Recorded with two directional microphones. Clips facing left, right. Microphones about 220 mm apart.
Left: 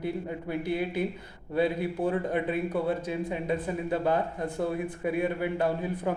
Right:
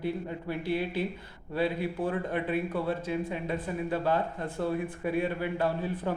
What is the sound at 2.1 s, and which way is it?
A man's voice, 20° left (ahead or behind).